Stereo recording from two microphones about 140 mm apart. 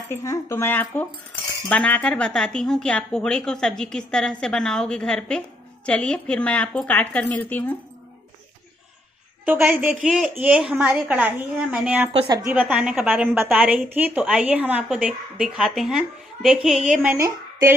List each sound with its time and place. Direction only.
0.1 s a woman's voice: 20° left (ahead or behind)
9.4 s a woman's voice: 10° right (ahead or behind)
12.1 s speech: 40° right (ahead or behind)
12.4 s a woman's voice: 15° right (ahead or behind)
17.2 s a woman's voice: 20° right (ahead or behind)